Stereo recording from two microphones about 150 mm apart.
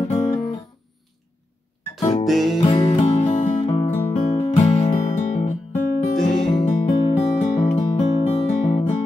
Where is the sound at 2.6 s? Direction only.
35° left (ahead or behind); by 3.6 s 55° left (ahead or behind).